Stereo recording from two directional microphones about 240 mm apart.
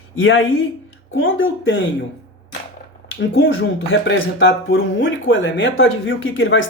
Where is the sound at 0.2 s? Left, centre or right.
Left.